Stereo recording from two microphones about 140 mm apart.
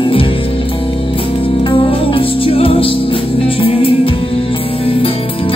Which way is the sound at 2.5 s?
40° left (ahead or behind).